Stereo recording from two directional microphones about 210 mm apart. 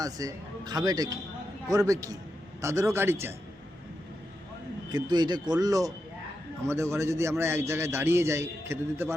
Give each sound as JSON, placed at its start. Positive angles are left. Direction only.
{"t": 0.0, "sound": "a man's voice", "side_deg": -15}
{"t": 4.9, "sound": "a man's voice", "side_deg": -20}